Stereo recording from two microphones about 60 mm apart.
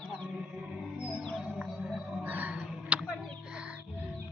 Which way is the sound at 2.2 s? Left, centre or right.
Right.